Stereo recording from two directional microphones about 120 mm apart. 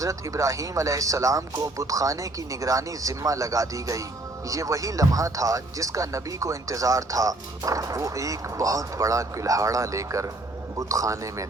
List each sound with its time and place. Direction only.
0.0 s speech: 25° right (ahead or behind)